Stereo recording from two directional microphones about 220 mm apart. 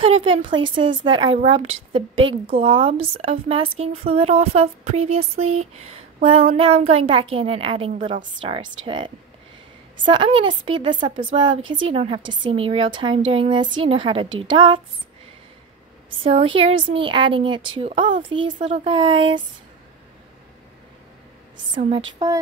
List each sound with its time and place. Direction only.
0.0 s a woman's voice: 25° right (ahead or behind)
16.2 s a woman's voice: 25° right (ahead or behind)